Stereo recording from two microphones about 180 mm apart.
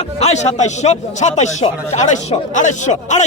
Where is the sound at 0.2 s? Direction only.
40° left (ahead or behind).